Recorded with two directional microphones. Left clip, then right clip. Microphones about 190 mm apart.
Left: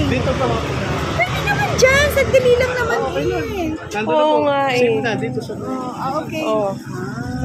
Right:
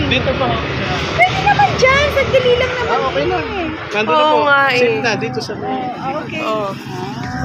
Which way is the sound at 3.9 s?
35° left (ahead or behind).